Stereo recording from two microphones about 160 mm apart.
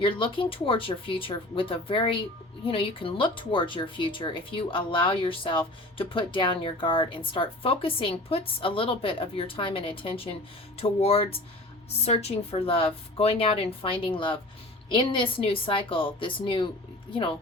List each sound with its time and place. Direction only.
0.0 s speech: 35° left (ahead or behind)